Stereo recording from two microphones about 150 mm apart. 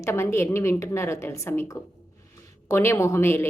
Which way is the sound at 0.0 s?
15° left (ahead or behind).